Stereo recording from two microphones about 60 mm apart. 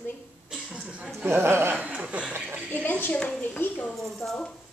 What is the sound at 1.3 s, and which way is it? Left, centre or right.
Speech, right.